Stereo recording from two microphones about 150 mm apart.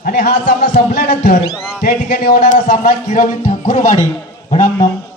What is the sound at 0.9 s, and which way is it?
Speech, 90° left.